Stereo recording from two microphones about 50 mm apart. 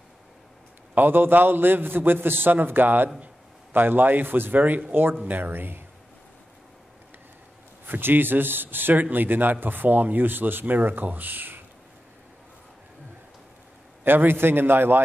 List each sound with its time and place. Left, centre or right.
0.9 s a man's voice: right
7.8 s a man's voice: right
14.0 s a man's voice: right